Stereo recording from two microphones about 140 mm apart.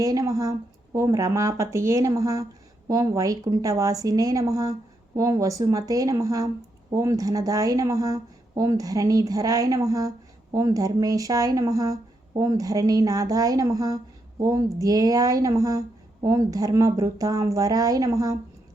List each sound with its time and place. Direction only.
0.0 s speech: 25° right (ahead or behind)